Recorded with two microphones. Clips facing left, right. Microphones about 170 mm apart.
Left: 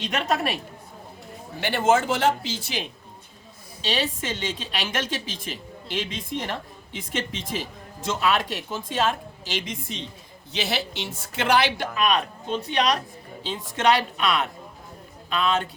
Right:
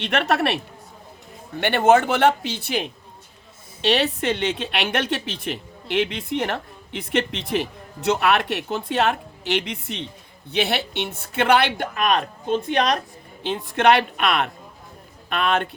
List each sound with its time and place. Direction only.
0.0 s a woman's voice: 70° right (ahead or behind)
1.6 s speech: 60° right (ahead or behind)